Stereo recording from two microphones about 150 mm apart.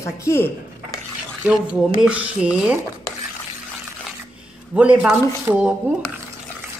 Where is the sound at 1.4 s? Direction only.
5° right (ahead or behind).